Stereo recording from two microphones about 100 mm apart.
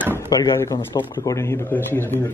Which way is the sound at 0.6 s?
25° left (ahead or behind).